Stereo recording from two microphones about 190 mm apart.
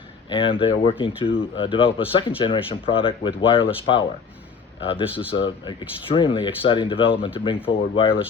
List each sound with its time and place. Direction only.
0.3 s speech: 25° left (ahead or behind)
4.8 s speech: 30° left (ahead or behind)